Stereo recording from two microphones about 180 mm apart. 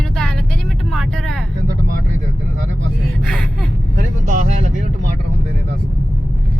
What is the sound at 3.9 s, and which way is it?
Speech, 45° right (ahead or behind).